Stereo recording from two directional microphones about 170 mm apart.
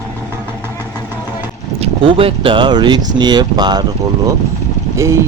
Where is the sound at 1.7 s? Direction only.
30° right (ahead or behind).